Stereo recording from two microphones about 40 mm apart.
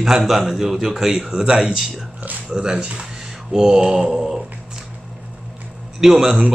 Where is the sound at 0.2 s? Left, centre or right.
Centre.